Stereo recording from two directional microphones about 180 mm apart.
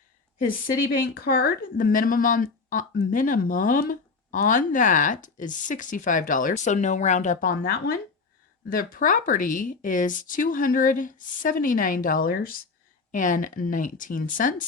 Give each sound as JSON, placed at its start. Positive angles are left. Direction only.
{"t": 0.4, "sound": "speech", "side_deg": 55}